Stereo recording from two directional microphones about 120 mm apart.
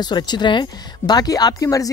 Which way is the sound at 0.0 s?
40° left (ahead or behind).